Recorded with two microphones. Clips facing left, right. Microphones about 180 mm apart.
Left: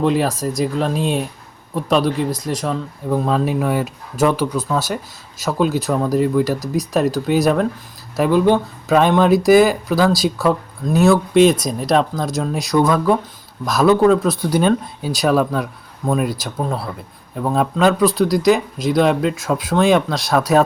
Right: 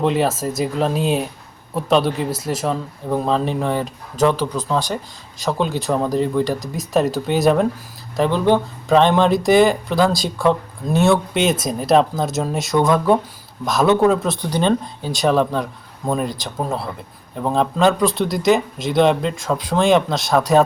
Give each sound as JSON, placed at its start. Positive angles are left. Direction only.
{"t": 0.0, "sound": "speech", "side_deg": 0}